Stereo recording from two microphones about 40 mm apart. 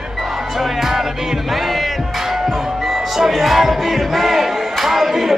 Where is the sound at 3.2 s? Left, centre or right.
Centre.